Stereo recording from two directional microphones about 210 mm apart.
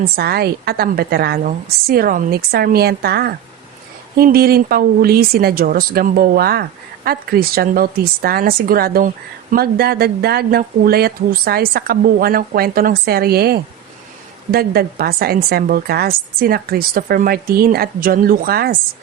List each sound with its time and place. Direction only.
0.2 s speech: 50° right (ahead or behind)